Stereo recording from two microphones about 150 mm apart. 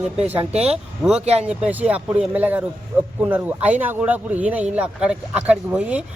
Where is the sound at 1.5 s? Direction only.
10° right (ahead or behind).